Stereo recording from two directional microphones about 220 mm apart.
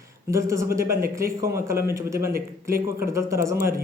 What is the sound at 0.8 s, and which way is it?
Speech, 40° right (ahead or behind).